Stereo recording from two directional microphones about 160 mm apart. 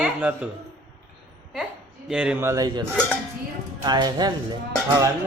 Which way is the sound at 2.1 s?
5° right (ahead or behind).